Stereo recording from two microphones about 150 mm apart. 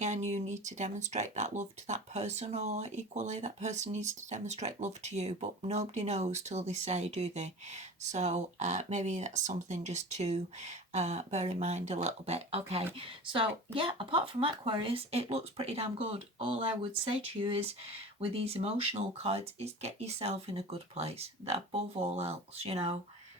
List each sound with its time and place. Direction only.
0.0 s speech: 50° right (ahead or behind)